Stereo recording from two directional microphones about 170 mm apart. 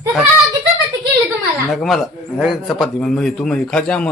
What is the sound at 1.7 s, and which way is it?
A man's voice, centre (ahead or behind).